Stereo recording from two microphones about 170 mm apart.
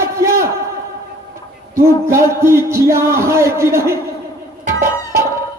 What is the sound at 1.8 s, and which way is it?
Speech, 15° right (ahead or behind).